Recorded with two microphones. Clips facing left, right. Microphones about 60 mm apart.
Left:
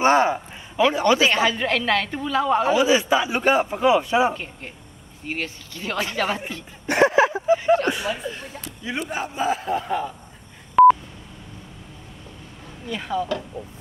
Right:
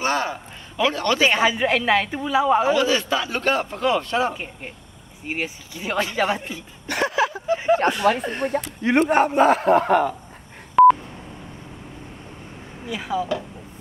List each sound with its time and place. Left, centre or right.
0.0 s a sound: left
0.9 s a man's voice: centre
1.3 s a woman's voice: centre
2.7 s a man's voice: centre
4.3 s a woman's voice: centre
6.9 s a sound: left
7.5 s a woman's voice: centre
8.1 s a man's voice: right
10.8 s sidetone: centre
12.8 s speech: centre